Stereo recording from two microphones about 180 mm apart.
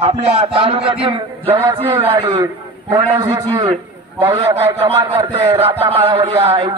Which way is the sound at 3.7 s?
30° right (ahead or behind).